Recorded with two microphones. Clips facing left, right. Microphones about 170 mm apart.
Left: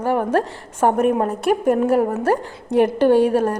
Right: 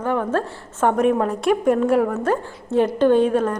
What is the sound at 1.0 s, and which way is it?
Speech, 5° left (ahead or behind).